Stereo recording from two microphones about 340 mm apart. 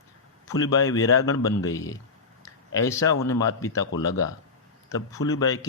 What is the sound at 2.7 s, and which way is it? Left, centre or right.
Speech, centre.